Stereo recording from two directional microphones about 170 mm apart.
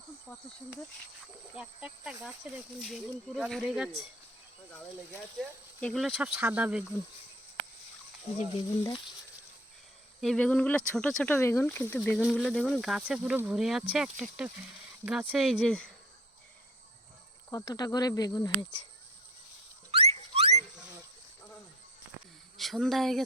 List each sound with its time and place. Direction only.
0.3 s speech: 15° left (ahead or behind)
1.5 s speech: 5° right (ahead or behind)
5.4 s speech: centre (ahead or behind)
6.1 s speech: 10° right (ahead or behind)
10.2 s speech: 5° left (ahead or behind)
12.2 s speech: centre (ahead or behind)
17.5 s speech: 20° left (ahead or behind)
19.9 s a sound: 35° right (ahead or behind)
22.5 s speech: centre (ahead or behind)